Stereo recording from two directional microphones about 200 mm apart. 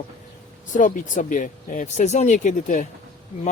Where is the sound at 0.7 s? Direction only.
40° left (ahead or behind).